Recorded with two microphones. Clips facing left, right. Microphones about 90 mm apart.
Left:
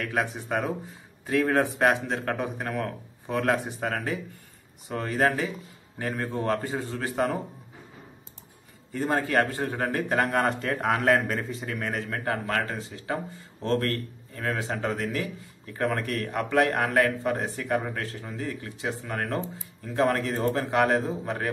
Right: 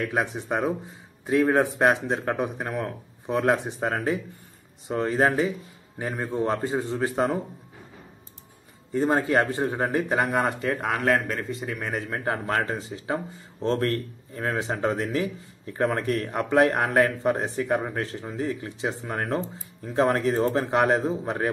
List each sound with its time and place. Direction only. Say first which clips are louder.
0.0 s speech: right 2 dB; 20° right (ahead or behind)
8.9 s speech: right 3 dB; 25° right (ahead or behind); by 12.0 s 5° right (ahead or behind)
12.1 s speech: right 3 dB; 25° right (ahead or behind)